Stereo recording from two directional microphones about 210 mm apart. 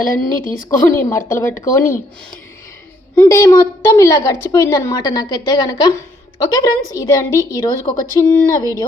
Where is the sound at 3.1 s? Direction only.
10° left (ahead or behind).